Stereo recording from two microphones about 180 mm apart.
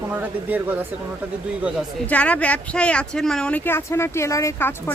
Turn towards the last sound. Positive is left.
turn(degrees=10)  # may be behind; listen again after turning